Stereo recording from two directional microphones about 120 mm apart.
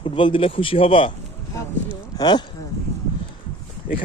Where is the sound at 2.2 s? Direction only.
35° left (ahead or behind).